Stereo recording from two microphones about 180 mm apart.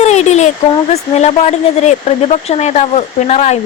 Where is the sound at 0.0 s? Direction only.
40° left (ahead or behind).